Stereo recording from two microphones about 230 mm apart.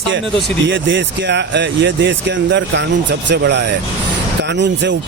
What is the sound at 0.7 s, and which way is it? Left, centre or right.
Speech, right.